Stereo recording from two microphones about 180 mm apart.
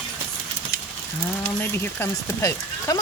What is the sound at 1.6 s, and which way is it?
Speech, 15° left (ahead or behind).